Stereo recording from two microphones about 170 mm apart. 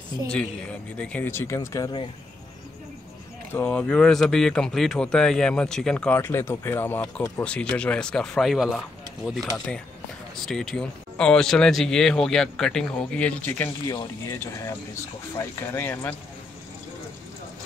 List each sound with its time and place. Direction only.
0.3 s speech: 5° left (ahead or behind); by 2.0 s 25° left (ahead or behind)
3.5 s speech: 10° left (ahead or behind)
10.3 s speech: centre (ahead or behind)